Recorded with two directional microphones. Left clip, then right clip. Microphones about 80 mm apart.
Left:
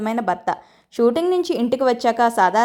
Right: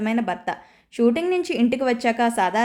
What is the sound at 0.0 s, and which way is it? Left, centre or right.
Speech, left.